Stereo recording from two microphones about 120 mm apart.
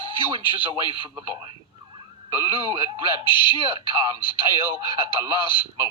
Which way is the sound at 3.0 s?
40° left (ahead or behind).